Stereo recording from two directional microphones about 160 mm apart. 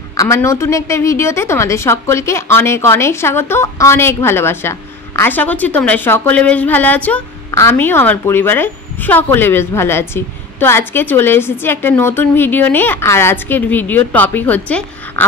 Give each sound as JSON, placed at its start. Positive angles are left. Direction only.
{"t": 0.2, "sound": "a woman's voice", "side_deg": 20}